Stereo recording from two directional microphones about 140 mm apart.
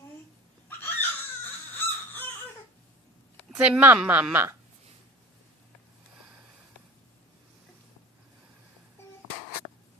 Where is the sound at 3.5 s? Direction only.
10° right (ahead or behind).